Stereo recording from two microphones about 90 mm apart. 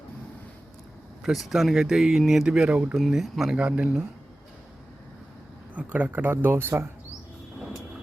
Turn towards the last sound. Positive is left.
turn(degrees=-25)  # may be behind; listen again after turning